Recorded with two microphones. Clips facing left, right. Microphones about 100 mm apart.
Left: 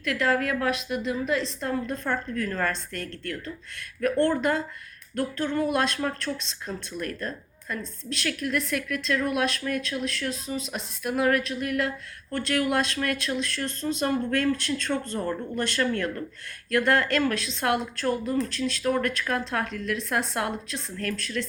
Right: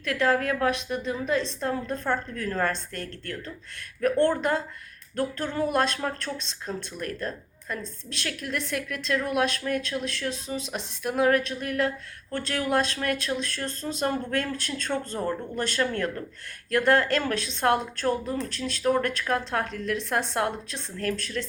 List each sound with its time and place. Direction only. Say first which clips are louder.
0.0 s a woman's voice: right 1 dB; 30° right (ahead or behind)
5.5 s a woman's voice: right 1 dB; 40° right (ahead or behind); by 15.6 s 20° right (ahead or behind)
15.8 s a woman's voice: even; 30° right (ahead or behind)